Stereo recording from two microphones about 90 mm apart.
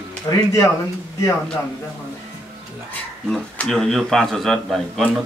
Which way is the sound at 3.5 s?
5° left (ahead or behind).